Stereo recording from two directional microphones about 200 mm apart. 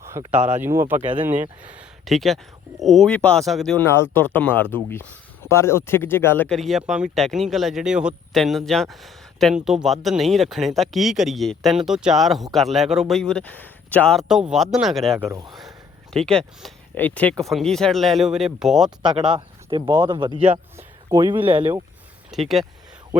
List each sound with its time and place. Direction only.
0.0 s a sound: 15° right (ahead or behind)
0.6 s speech: 10° right (ahead or behind)
3.8 s speech: 15° left (ahead or behind)
15.2 s speech: 15° right (ahead or behind)
16.1 s speech: 5° left (ahead or behind)
19.0 s speech: 25° right (ahead or behind)
22.3 s speech: centre (ahead or behind)